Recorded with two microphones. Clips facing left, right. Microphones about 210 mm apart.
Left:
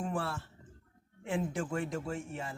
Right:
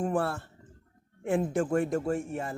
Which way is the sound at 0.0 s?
50° right (ahead or behind).